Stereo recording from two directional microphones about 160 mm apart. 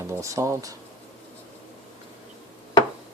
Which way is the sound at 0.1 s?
20° right (ahead or behind).